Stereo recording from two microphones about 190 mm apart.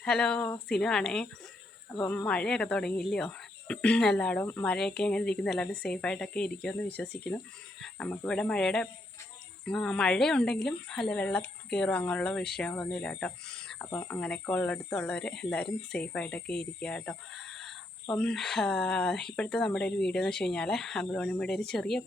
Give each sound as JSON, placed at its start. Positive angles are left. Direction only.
{"t": 0.0, "sound": "speech", "side_deg": 5}